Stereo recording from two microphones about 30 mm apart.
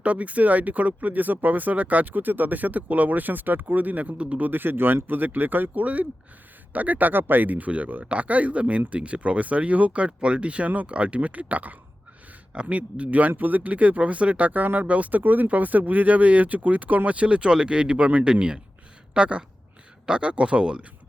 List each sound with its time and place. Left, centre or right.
0.0 s speech: right
4.4 s speech: right
5.1 s speech: right
8.0 s speech: right
10.1 s speech: right
12.6 s speech: right
13.6 s speech: right
14.8 s speech: right
15.2 s speech: right
15.4 s speech: right
17.2 s speech: right
18.3 s speech: right